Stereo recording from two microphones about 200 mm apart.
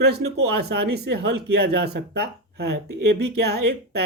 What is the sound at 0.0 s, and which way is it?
Speech, 55° right (ahead or behind).